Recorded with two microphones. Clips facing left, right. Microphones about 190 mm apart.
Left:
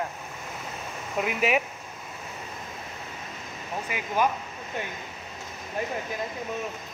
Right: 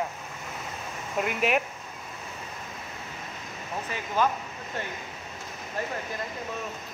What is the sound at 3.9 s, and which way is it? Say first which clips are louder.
Speech: left 1 dB; 10° left (ahead or behind).